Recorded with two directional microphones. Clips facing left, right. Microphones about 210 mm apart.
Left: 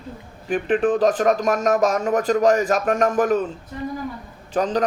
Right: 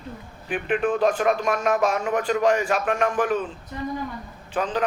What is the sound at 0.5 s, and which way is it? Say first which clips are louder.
Speech: left 4 dB; 35° left (ahead or behind).